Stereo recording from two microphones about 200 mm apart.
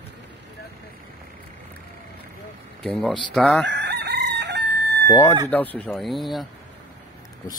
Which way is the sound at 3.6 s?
60° right (ahead or behind).